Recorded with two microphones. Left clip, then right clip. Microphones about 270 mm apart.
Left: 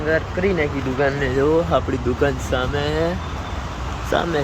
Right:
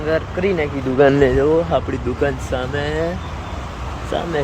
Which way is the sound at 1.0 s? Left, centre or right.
Right.